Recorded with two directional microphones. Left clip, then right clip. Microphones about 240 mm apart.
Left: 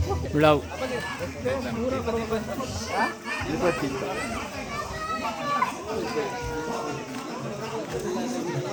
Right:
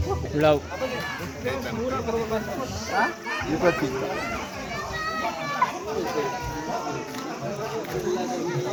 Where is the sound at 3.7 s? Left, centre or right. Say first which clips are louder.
Right 3 dB; right.